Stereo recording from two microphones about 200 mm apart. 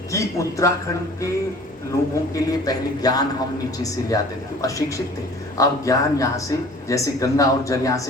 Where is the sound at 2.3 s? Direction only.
20° left (ahead or behind).